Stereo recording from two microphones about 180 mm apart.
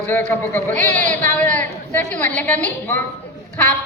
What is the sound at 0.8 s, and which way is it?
Speech, 45° right (ahead or behind).